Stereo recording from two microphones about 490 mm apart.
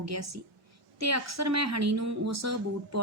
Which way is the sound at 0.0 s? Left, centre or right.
Right.